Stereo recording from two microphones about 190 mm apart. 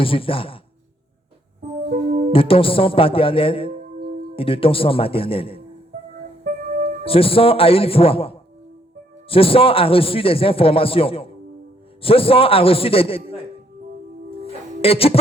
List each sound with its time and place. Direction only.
0.0 s a man's voice: 30° left (ahead or behind)
2.3 s a man's voice: 30° left (ahead or behind)
6.4 s music: 45° right (ahead or behind)
7.0 s a man's voice: 30° left (ahead or behind)
14.4 s music: 30° left (ahead or behind)